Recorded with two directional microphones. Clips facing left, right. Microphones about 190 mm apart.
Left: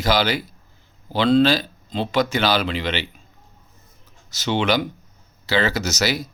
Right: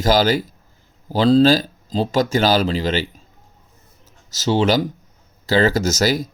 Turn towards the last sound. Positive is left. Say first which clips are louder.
# right 5 dB
turn(degrees=-45)  # may be behind; listen again after turning